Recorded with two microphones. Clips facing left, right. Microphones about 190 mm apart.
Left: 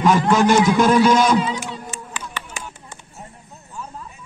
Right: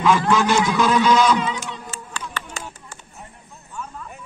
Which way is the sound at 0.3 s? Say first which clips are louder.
Left 4 dB; 45° left (ahead or behind).